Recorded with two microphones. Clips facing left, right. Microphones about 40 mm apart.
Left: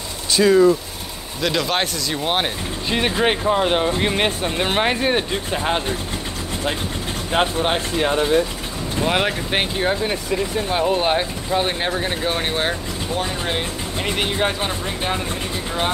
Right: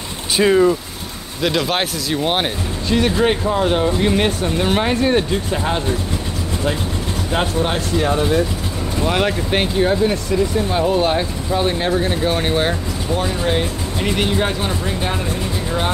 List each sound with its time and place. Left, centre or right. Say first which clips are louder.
0.3 s speech: even; right
1.4 s speech: right 2 dB; centre
2.9 s speech: right 3 dB; left
7.3 s speech: left 1 dB; left